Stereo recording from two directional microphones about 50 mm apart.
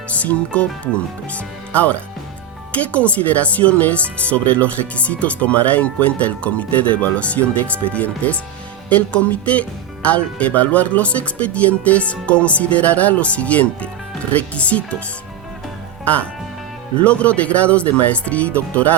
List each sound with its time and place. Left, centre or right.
0.1 s speech: left
16.0 s speech: left